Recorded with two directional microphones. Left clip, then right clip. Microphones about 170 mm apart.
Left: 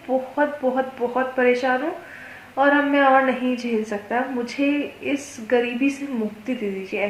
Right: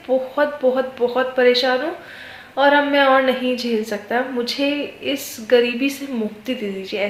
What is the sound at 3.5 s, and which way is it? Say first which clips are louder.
A woman's voice: right 3 dB; 50° right (ahead or behind).